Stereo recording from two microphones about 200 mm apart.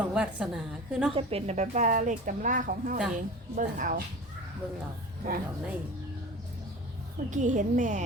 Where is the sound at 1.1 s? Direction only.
30° right (ahead or behind).